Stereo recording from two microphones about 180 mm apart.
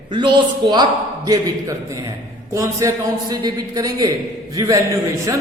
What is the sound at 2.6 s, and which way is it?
A man's voice, 20° right (ahead or behind).